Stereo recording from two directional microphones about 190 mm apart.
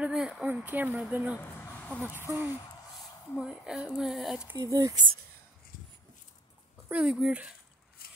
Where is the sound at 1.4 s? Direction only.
10° left (ahead or behind).